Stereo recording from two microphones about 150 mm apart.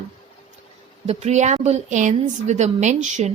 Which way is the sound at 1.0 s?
45° right (ahead or behind).